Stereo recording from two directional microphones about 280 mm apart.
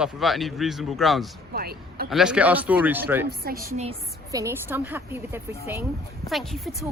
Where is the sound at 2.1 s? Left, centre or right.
Centre.